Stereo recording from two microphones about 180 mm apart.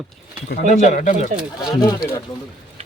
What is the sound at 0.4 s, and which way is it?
Speech, 55° left (ahead or behind).